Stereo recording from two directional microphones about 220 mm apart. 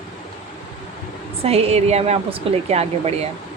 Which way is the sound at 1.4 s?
30° right (ahead or behind).